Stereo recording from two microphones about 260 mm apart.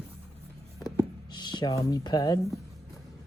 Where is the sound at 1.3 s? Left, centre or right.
Centre.